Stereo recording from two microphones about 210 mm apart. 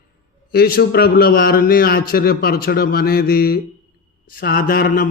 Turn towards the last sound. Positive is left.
turn(degrees=45)  # may be behind; listen again after turning